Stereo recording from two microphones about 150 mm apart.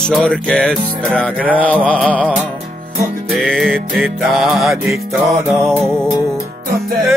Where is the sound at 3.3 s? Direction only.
Centre (ahead or behind).